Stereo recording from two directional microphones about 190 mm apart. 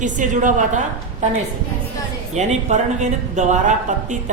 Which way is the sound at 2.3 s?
35° right (ahead or behind).